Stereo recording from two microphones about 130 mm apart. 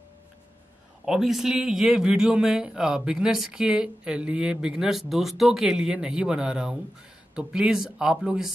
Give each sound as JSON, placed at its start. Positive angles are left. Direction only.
{"t": 1.0, "sound": "a man's voice", "side_deg": -5}